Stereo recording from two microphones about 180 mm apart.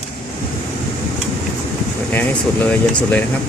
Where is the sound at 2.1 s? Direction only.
10° left (ahead or behind).